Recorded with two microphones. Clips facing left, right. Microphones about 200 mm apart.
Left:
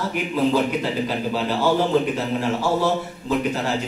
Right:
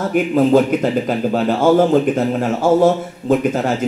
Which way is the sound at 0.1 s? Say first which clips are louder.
Right 9 dB; 50° right (ahead or behind).